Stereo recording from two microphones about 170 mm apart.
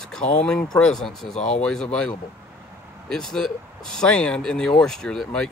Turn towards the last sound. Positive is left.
turn(degrees=5)  # may be behind; listen again after turning